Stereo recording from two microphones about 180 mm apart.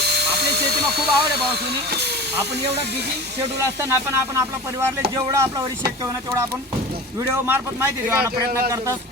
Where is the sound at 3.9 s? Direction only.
15° right (ahead or behind).